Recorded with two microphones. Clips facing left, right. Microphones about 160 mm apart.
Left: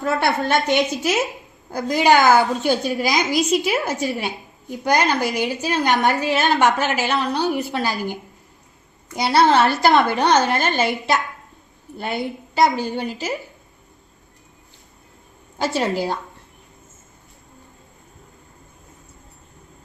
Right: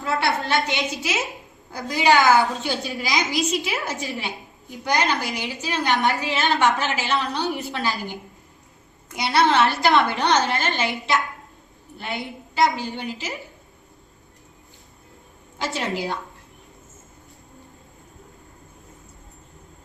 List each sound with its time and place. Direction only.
0.0 s a woman's voice: 50° left (ahead or behind)
9.2 s a woman's voice: 45° left (ahead or behind)
15.5 s a woman's voice: 35° left (ahead or behind)